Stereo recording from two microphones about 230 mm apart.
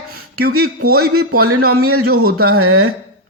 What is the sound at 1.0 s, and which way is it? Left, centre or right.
A woman's voice, right.